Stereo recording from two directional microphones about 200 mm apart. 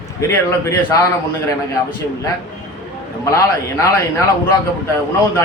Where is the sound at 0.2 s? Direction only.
15° left (ahead or behind).